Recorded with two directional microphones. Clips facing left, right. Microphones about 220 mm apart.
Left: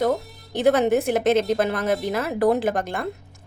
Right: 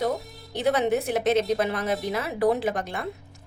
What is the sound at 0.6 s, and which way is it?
A woman's voice, 50° left (ahead or behind).